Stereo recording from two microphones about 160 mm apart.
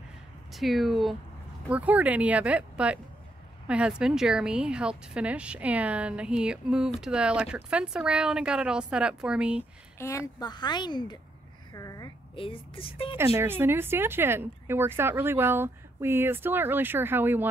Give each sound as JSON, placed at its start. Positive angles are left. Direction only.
{"t": 0.5, "sound": "speech", "side_deg": 0}
{"t": 9.9, "sound": "a woman's voice", "side_deg": 20}
{"t": 11.7, "sound": "a sound", "side_deg": 20}
{"t": 12.4, "sound": "speech", "side_deg": 35}
{"t": 13.4, "sound": "speech", "side_deg": -15}